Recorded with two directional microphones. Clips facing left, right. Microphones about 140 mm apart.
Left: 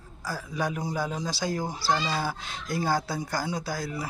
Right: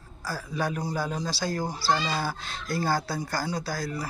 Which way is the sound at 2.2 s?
15° left (ahead or behind).